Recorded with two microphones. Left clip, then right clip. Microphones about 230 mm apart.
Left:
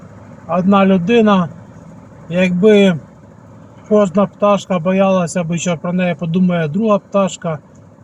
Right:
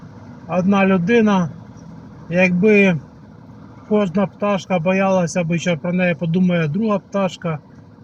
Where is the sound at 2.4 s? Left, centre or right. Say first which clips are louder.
Left 3 dB; centre.